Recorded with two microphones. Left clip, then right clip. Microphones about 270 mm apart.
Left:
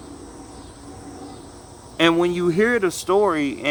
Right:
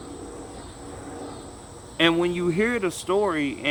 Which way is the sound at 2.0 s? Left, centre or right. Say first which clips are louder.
Left 3 dB; centre.